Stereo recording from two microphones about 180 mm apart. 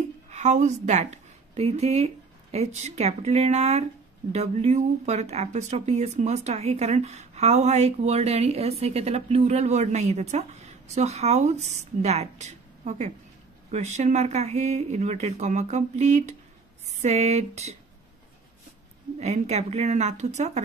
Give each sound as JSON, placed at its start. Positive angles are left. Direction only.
{"t": 0.3, "sound": "a woman's voice", "side_deg": -40}
{"t": 19.1, "sound": "speech", "side_deg": -40}